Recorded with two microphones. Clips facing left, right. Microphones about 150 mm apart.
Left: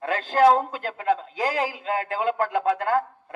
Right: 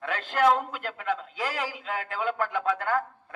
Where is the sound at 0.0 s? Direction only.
35° left (ahead or behind).